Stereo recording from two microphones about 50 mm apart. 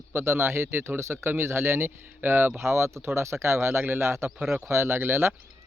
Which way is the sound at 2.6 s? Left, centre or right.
Right.